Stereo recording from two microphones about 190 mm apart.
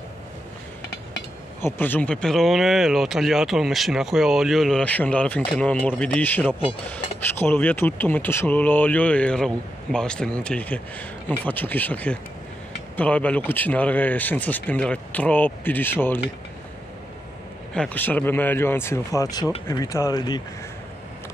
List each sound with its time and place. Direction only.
1.6 s speech: 10° left (ahead or behind)
17.7 s speech: 10° left (ahead or behind)